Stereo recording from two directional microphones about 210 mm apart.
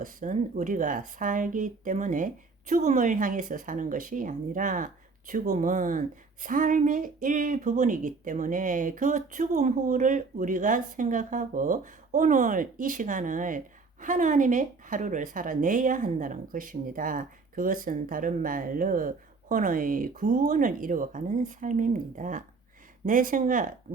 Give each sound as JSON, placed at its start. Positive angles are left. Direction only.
{"t": 0.0, "sound": "speech", "side_deg": -40}